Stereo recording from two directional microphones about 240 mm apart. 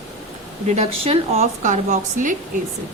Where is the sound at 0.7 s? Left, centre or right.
Right.